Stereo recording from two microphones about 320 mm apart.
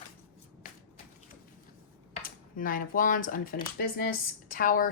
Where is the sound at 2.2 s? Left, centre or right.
Left.